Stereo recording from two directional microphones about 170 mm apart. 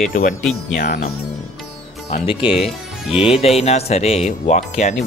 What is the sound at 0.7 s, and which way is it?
Speech, 70° left (ahead or behind).